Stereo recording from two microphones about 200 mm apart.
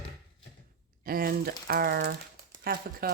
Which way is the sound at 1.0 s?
45° right (ahead or behind).